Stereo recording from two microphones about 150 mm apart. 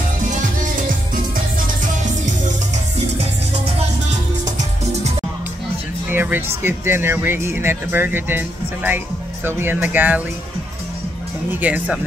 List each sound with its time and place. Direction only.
0.3 s music: 60° right (ahead or behind)
6.0 s speech: 10° right (ahead or behind)
11.6 s speech: 10° right (ahead or behind)